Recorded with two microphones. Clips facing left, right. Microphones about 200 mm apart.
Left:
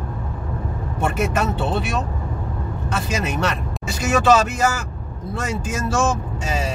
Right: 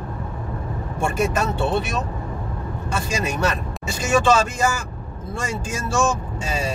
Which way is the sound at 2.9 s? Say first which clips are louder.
Left 1 dB; 5° left (ahead or behind).